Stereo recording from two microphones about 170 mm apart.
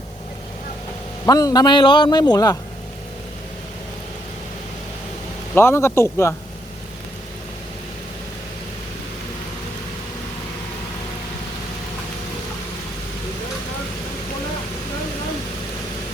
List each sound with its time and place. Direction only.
1.2 s a man's voice: 20° left (ahead or behind)
5.5 s speech: 15° left (ahead or behind)